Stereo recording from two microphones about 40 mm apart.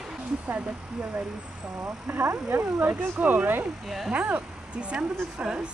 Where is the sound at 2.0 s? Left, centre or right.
Right.